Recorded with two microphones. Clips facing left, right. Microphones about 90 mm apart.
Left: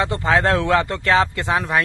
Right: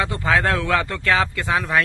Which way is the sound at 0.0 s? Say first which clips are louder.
Left 2 dB; 25° left (ahead or behind).